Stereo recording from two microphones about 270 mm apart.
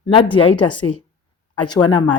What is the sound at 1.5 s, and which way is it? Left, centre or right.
Speech, centre.